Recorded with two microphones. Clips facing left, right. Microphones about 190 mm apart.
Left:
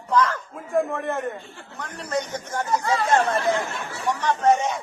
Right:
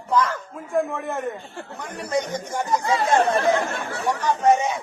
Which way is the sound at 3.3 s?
60° right (ahead or behind).